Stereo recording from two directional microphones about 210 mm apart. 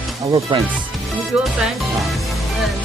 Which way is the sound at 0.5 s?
25° right (ahead or behind).